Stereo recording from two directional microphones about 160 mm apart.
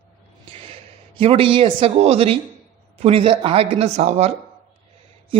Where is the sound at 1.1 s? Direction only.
35° right (ahead or behind).